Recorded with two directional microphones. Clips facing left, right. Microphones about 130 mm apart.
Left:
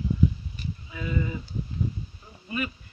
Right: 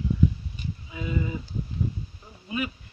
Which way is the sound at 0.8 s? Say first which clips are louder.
Right 1 dB; 15° right (ahead or behind).